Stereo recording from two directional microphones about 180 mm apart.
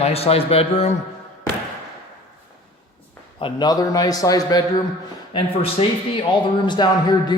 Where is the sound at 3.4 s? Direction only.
25° left (ahead or behind).